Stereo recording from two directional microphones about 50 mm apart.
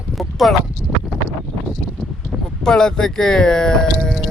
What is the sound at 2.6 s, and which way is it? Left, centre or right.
Speech, centre.